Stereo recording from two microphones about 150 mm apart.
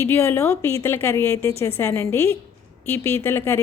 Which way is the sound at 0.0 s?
15° left (ahead or behind).